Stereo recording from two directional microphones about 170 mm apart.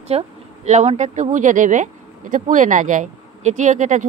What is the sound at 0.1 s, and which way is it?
Speech, 35° right (ahead or behind).